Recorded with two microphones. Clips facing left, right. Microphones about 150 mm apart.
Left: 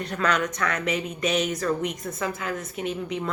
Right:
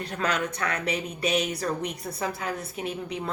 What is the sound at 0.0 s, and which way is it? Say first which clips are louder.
A woman's voice: left 3 dB; 30° right (ahead or behind).